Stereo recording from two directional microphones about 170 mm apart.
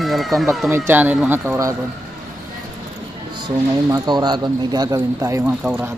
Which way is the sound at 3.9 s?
25° right (ahead or behind).